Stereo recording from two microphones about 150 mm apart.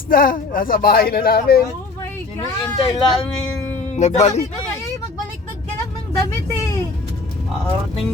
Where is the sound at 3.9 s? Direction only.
50° left (ahead or behind).